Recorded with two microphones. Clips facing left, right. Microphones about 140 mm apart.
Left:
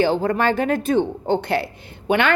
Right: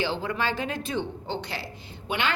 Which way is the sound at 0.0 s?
50° left (ahead or behind).